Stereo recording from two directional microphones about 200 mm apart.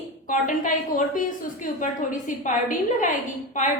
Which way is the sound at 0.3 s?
40° left (ahead or behind).